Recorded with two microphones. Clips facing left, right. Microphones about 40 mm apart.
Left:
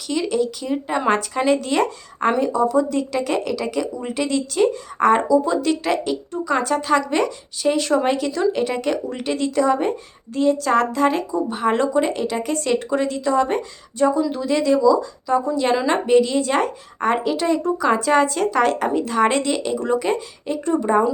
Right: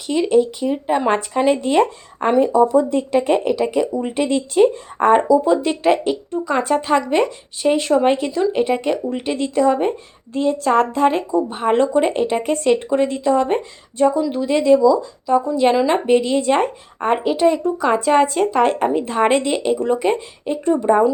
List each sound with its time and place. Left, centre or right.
0.1 s speech: right
10.3 s speech: right
20.7 s speech: centre